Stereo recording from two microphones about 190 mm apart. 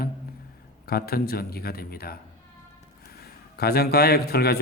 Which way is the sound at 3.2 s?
55° left (ahead or behind).